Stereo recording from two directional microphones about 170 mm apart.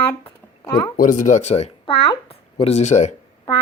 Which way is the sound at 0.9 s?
50° left (ahead or behind).